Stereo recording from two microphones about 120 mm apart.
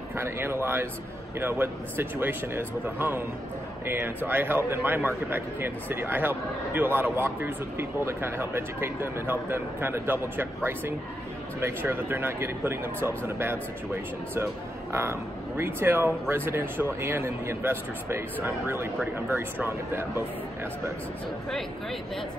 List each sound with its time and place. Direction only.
0.2 s a man's voice: 20° right (ahead or behind)